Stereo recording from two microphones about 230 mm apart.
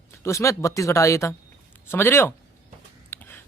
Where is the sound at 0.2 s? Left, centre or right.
Centre.